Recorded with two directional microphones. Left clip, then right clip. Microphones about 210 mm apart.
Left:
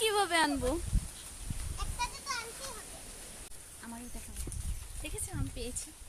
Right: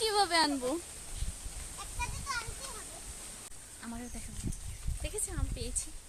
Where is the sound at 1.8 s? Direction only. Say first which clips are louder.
Left 3 dB; 45° left (ahead or behind).